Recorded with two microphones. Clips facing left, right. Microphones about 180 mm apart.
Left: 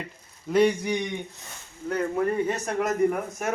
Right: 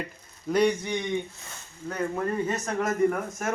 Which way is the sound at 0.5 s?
5° left (ahead or behind).